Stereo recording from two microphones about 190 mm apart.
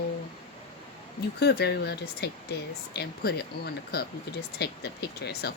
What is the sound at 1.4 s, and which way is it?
Speech, 60° left (ahead or behind).